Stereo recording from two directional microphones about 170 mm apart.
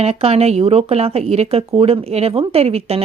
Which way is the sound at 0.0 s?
40° right (ahead or behind).